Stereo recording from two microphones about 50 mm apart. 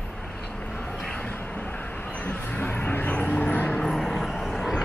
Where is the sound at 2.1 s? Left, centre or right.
Left.